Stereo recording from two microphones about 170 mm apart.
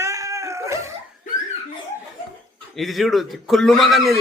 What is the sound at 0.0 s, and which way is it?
Dog, 20° right (ahead or behind).